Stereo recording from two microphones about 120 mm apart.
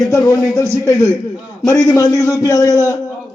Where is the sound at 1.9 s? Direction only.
25° left (ahead or behind).